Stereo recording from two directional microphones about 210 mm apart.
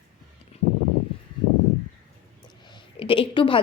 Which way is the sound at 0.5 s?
30° left (ahead or behind).